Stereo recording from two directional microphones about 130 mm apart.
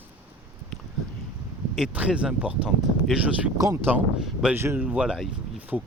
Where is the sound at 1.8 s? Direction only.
10° right (ahead or behind).